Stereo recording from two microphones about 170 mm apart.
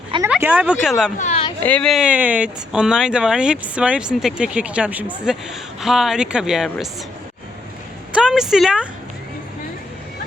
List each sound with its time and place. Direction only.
0.3 s speech: 10° right (ahead or behind)
1.2 s a sound: 40° left (ahead or behind)
1.6 s speech: 5° left (ahead or behind)
8.1 s a woman's voice: 5° right (ahead or behind)